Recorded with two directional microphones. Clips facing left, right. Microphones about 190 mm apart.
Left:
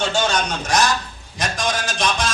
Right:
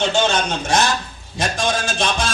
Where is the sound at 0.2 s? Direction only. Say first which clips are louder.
Right 2 dB; 25° right (ahead or behind).